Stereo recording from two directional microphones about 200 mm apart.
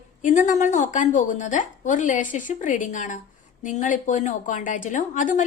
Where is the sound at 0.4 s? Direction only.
40° left (ahead or behind).